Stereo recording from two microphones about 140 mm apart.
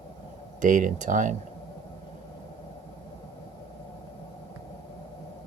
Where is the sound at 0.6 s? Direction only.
65° right (ahead or behind).